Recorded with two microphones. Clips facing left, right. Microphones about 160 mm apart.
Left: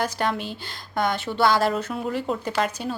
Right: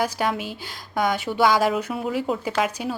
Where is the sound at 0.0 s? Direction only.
10° right (ahead or behind).